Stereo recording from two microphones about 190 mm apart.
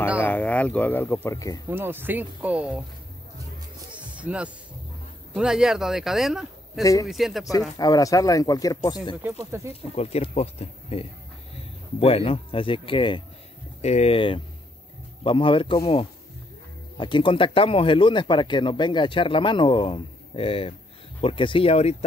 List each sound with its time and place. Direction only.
0.2 s speech: 10° left (ahead or behind)
1.7 s speech: 10° right (ahead or behind)
4.2 s speech: 5° right (ahead or behind)
6.8 s a man's voice: 15° left (ahead or behind)
7.1 s speech: centre (ahead or behind)
7.7 s speech: 20° left (ahead or behind)
9.2 s speech: 15° right (ahead or behind)
9.9 s speech: 35° left (ahead or behind)